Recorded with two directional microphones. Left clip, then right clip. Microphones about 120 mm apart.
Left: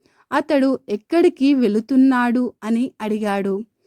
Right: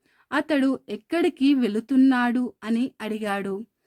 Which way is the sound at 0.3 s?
40° left (ahead or behind).